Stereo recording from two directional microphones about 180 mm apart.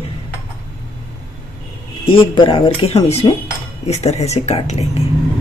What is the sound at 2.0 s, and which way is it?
Speech, 30° left (ahead or behind).